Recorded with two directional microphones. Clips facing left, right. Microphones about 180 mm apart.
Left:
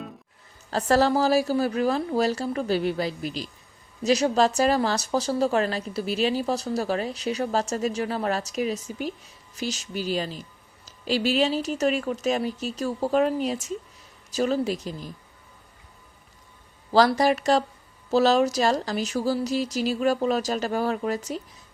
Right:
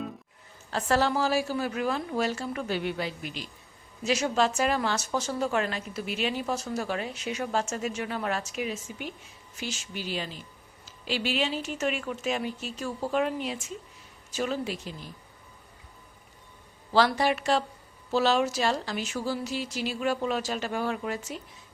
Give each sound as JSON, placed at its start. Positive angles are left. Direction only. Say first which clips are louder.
{"t": 0.7, "sound": "a woman's voice", "louder": "left 5 dB", "side_deg": 40}
{"t": 16.9, "sound": "a woman's voice", "louder": "left 4 dB", "side_deg": 40}